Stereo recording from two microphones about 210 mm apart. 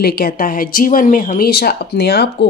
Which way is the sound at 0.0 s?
45° left (ahead or behind).